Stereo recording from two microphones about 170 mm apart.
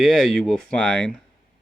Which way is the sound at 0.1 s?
5° left (ahead or behind).